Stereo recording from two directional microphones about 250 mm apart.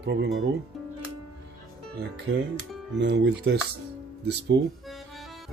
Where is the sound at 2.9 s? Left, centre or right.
Right.